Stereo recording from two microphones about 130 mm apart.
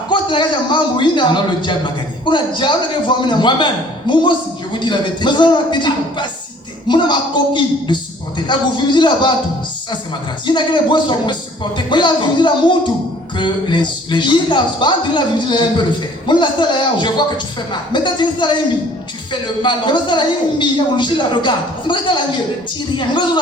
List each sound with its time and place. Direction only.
0.1 s speech: 35° left (ahead or behind)
10.4 s speech: 35° left (ahead or behind)